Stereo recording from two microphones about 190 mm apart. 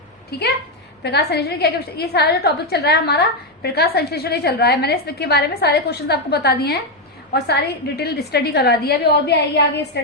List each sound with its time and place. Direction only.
0.3 s a woman's voice: 60° left (ahead or behind)